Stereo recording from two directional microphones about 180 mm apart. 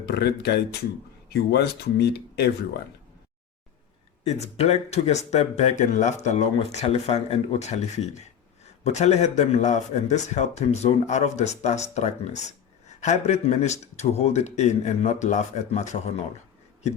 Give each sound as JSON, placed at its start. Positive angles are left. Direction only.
{"t": 0.0, "sound": "speech", "side_deg": 65}
{"t": 4.2, "sound": "speech", "side_deg": 35}